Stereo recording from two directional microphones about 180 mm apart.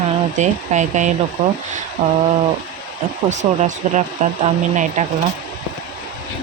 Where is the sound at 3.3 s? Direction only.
40° right (ahead or behind).